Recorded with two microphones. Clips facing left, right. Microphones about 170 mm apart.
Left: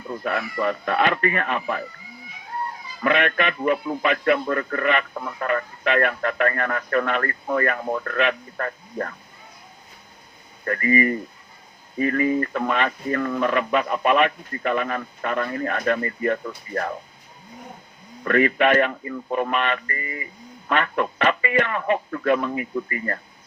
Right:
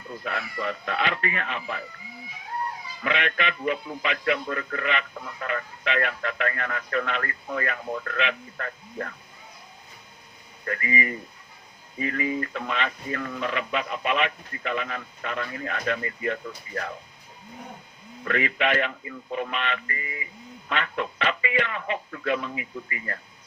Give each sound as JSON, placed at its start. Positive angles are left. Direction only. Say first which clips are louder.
{"t": 0.1, "sound": "a man's voice", "louder": "left 6 dB", "side_deg": 55}
{"t": 3.0, "sound": "a man's voice", "louder": "left 6 dB", "side_deg": 50}
{"t": 10.7, "sound": "a man's voice", "louder": "left 8 dB", "side_deg": 45}
{"t": 18.3, "sound": "a man's voice", "louder": "left 7 dB", "side_deg": 50}